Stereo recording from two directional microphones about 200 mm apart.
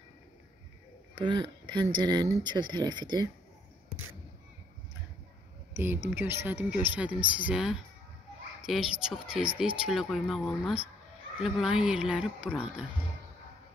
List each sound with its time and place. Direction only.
1.2 s speech: 20° right (ahead or behind)
5.7 s speech: 10° right (ahead or behind)